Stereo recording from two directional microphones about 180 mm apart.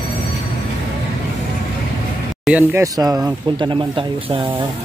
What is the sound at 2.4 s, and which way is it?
Speech, 10° right (ahead or behind).